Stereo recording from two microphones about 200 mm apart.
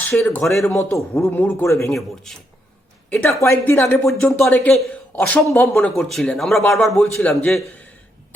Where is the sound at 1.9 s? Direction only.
Centre (ahead or behind).